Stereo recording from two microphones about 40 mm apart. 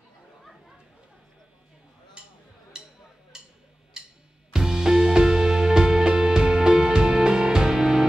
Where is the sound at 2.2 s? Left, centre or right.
Right.